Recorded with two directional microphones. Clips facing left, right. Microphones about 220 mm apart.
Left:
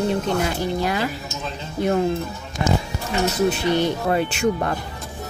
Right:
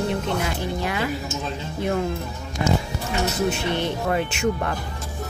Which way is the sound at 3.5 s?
35° left (ahead or behind).